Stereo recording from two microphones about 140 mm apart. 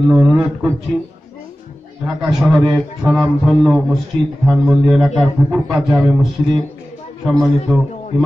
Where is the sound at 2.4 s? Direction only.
Centre (ahead or behind).